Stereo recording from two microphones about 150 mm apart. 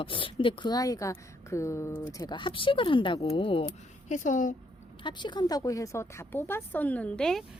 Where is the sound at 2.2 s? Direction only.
30° left (ahead or behind).